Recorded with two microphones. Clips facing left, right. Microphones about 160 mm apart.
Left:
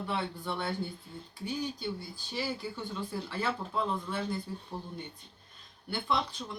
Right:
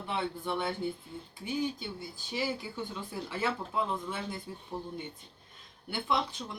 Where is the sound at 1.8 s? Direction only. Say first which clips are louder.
Left 3 dB; 15° right (ahead or behind).